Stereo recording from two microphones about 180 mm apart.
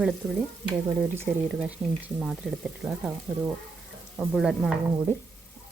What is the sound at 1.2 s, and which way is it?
Speech, 5° right (ahead or behind).